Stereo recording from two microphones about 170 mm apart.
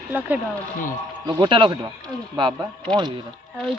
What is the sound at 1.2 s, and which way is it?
Speech, 25° right (ahead or behind).